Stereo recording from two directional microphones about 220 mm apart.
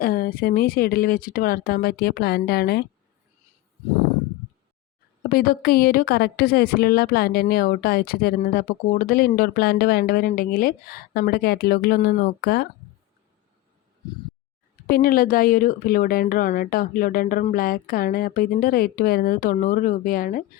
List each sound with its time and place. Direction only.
0.0 s a woman's voice: 40° left (ahead or behind)
5.3 s a woman's voice: 40° left (ahead or behind)
14.8 s speech: 40° left (ahead or behind)